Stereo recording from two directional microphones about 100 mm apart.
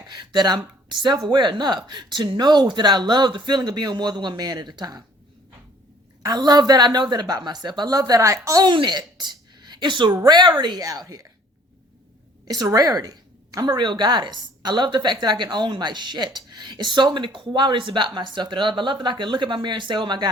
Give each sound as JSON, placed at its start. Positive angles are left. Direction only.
{"t": 0.1, "sound": "a woman's voice", "side_deg": -45}
{"t": 6.2, "sound": "a woman's voice", "side_deg": -40}
{"t": 8.6, "sound": "a woman's voice", "side_deg": -50}
{"t": 10.1, "sound": "a woman's voice", "side_deg": -40}
{"t": 12.5, "sound": "a woman's voice", "side_deg": -35}